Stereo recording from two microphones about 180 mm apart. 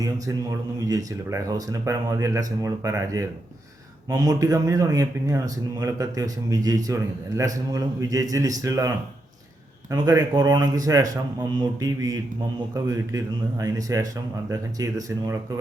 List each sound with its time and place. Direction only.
0.8 s speech: 20° right (ahead or behind)
9.9 s speech: 20° right (ahead or behind)